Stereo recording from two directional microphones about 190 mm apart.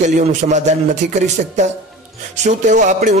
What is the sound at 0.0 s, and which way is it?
Speech, 40° right (ahead or behind).